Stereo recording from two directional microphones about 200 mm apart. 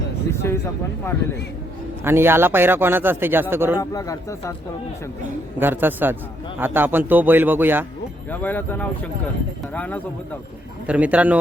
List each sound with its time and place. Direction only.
0.3 s speech: 10° left (ahead or behind)
2.0 s speech: 10° right (ahead or behind)
3.8 s speech: 15° left (ahead or behind)
5.5 s speech: 10° right (ahead or behind)
8.3 s speech: 10° left (ahead or behind)
10.8 s speech: 5° right (ahead or behind)